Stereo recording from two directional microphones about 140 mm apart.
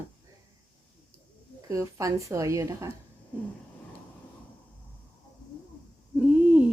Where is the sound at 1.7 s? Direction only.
25° right (ahead or behind).